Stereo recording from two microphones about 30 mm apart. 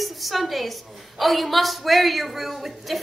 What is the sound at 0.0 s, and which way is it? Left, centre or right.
A woman's voice, centre.